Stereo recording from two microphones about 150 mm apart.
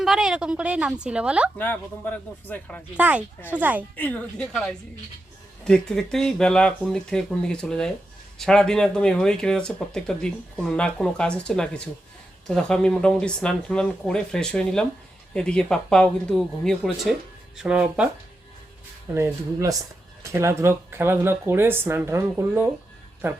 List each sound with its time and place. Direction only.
0.0 s speech: 5° right (ahead or behind)
1.5 s speech: 10° left (ahead or behind)
3.0 s speech: 10° right (ahead or behind)
3.9 s speech: 10° left (ahead or behind); by 18.1 s 10° right (ahead or behind)
19.1 s speech: 20° right (ahead or behind)